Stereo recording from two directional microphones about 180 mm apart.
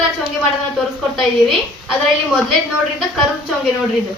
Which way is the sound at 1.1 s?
Centre (ahead or behind).